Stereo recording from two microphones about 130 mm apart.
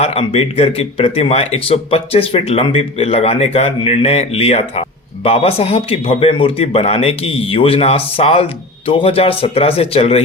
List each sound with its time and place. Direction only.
0.0 s speech: 50° left (ahead or behind)